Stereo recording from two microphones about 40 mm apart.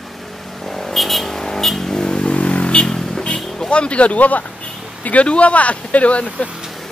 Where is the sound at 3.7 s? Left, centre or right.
Left.